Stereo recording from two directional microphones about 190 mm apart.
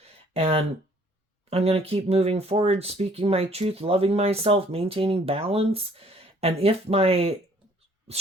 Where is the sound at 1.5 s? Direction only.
30° right (ahead or behind).